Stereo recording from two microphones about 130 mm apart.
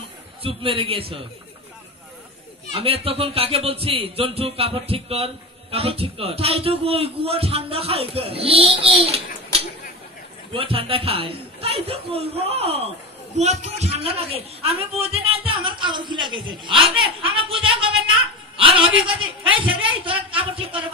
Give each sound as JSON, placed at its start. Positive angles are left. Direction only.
{"t": 0.4, "sound": "speech", "side_deg": -45}
{"t": 2.8, "sound": "speech", "side_deg": -45}
{"t": 13.4, "sound": "a woman's voice", "side_deg": -60}